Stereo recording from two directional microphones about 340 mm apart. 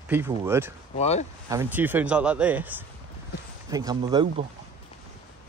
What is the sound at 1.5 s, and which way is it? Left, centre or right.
Speech, centre.